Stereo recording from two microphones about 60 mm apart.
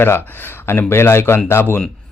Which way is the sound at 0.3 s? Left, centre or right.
Left.